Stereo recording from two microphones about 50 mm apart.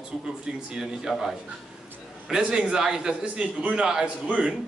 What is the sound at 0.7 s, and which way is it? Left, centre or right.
Speech, centre.